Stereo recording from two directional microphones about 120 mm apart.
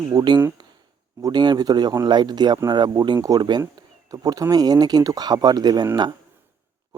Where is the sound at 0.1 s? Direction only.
35° right (ahead or behind).